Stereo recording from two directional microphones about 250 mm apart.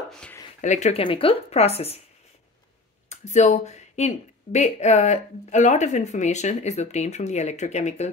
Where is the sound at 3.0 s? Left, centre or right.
Left.